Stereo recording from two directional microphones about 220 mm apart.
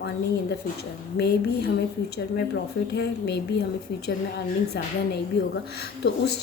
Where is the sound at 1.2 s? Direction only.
45° left (ahead or behind).